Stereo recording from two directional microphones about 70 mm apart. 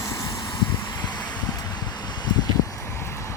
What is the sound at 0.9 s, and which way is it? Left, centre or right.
Vehicle, left.